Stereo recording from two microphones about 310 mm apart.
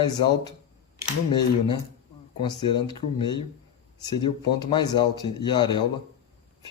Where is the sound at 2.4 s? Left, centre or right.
Centre.